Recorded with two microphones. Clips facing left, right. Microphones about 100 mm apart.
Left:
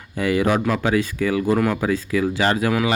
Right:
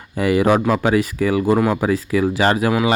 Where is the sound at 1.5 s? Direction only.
15° right (ahead or behind).